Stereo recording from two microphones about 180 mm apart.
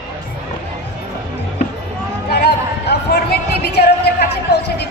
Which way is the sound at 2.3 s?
65° left (ahead or behind).